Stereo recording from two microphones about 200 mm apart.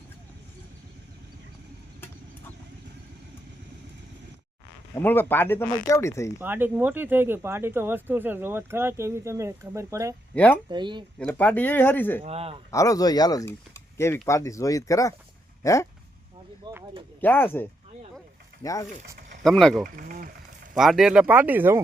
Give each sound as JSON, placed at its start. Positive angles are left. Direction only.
{"t": 4.9, "sound": "speech", "side_deg": 10}
{"t": 6.4, "sound": "speech", "side_deg": -10}
{"t": 10.3, "sound": "speech", "side_deg": 5}
{"t": 10.7, "sound": "speech", "side_deg": -25}
{"t": 11.2, "sound": "speech", "side_deg": 5}
{"t": 12.2, "sound": "speech", "side_deg": -30}
{"t": 12.7, "sound": "speech", "side_deg": 15}
{"t": 16.7, "sound": "speech", "side_deg": -20}
{"t": 17.2, "sound": "speech", "side_deg": 10}
{"t": 18.9, "sound": "speech", "side_deg": -40}
{"t": 19.4, "sound": "speech", "side_deg": 0}
{"t": 20.0, "sound": "speech", "side_deg": -45}
{"t": 20.7, "sound": "speech", "side_deg": 0}